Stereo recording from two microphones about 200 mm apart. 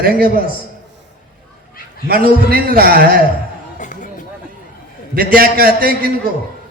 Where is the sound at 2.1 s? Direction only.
50° right (ahead or behind).